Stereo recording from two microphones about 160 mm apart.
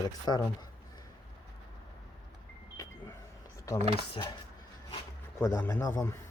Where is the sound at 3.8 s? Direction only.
40° right (ahead or behind).